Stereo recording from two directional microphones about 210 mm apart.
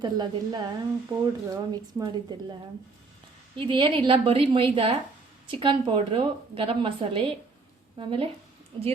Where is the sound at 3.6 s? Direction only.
25° right (ahead or behind).